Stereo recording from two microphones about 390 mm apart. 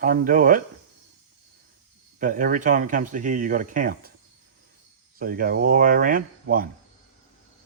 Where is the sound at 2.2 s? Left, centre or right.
Centre.